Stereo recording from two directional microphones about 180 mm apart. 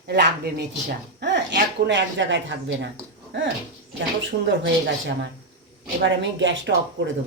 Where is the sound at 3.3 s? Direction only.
75° right (ahead or behind).